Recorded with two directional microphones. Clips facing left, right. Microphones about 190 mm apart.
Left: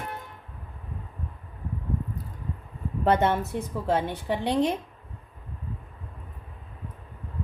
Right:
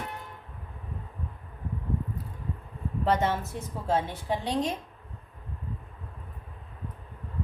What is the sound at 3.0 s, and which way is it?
A woman's voice, 60° left (ahead or behind).